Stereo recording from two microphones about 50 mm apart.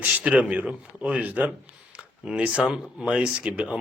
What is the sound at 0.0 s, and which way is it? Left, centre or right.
Speech, right.